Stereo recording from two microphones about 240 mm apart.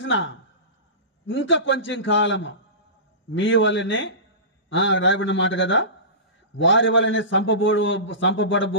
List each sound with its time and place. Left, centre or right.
0.0 s a man's voice: left